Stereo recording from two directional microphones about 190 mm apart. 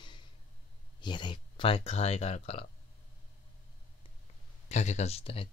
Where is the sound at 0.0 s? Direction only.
25° left (ahead or behind).